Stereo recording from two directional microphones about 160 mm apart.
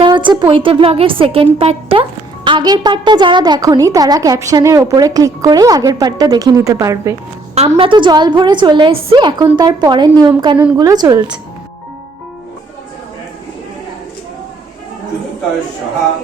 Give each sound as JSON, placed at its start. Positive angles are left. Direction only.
{"t": 0.0, "sound": "a woman's voice", "side_deg": -30}
{"t": 7.8, "sound": "a woman's voice", "side_deg": -30}